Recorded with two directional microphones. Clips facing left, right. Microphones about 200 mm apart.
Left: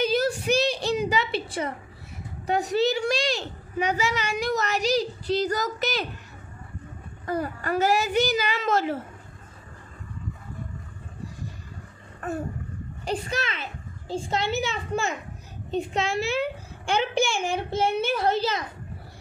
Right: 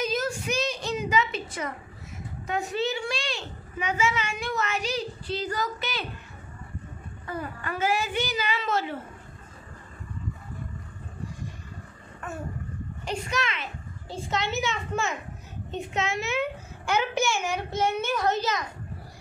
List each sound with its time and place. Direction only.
0.0 s a sound: 35° left (ahead or behind)
2.4 s a child's voice: 35° left (ahead or behind)
7.2 s a child's voice: 40° left (ahead or behind)
13.0 s a child's voice: 30° left (ahead or behind)